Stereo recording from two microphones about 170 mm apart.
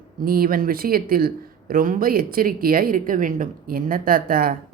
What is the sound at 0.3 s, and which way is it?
Speech, 60° right (ahead or behind).